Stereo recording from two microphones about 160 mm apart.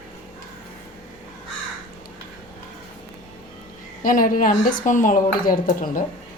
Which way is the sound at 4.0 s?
55° left (ahead or behind).